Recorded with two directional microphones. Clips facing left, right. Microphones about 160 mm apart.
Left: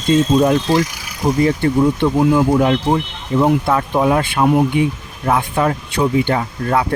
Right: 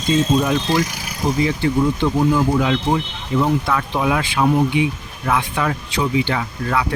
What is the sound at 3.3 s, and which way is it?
Speech, 45° left (ahead or behind).